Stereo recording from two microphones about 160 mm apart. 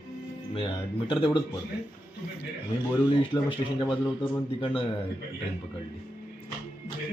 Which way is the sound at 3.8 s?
30° left (ahead or behind).